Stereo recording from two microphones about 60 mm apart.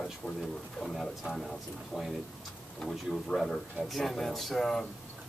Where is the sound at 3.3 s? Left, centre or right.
Centre.